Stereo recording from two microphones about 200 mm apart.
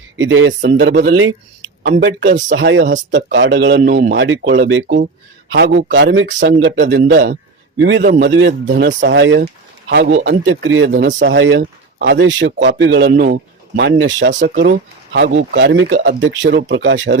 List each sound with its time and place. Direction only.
0.2 s speech: 70° right (ahead or behind)
1.1 s speech: 80° right
1.8 s speech: 60° right (ahead or behind)
3.8 s speech: 40° right (ahead or behind)
4.1 s speech: 65° right (ahead or behind)
8.7 s speech: 50° right (ahead or behind); by 12.0 s 75° right (ahead or behind)
12.0 s speech: 60° right (ahead or behind)
14.3 s speech: 50° right (ahead or behind); by 17.2 s 65° right (ahead or behind)